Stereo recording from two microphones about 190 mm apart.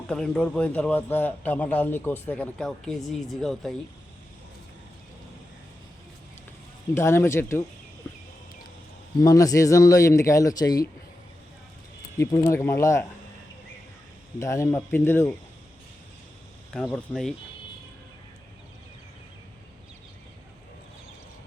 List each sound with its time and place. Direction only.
0.1 s a man's voice: 5° left (ahead or behind)
6.9 s a man's voice: 15° left (ahead or behind)
9.2 s a man's voice: 20° left (ahead or behind)
12.2 s a man's voice: 15° left (ahead or behind)
14.3 s a man's voice: 15° left (ahead or behind)
16.7 s speech: 5° left (ahead or behind)